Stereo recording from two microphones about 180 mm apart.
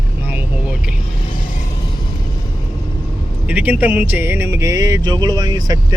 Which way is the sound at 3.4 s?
10° right (ahead or behind).